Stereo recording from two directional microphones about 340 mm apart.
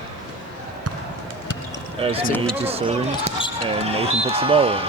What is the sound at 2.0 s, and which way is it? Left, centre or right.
Speech, centre.